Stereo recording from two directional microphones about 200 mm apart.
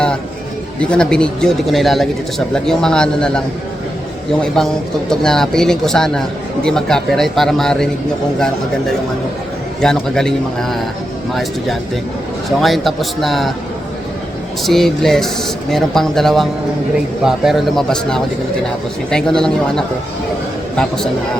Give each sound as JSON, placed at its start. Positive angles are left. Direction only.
{"t": 0.8, "sound": "speech", "side_deg": 5}
{"t": 9.8, "sound": "speech", "side_deg": 5}
{"t": 12.5, "sound": "speech", "side_deg": 0}
{"t": 14.6, "sound": "speech", "side_deg": 0}